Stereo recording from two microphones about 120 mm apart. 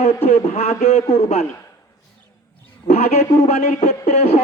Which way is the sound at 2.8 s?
65° left (ahead or behind).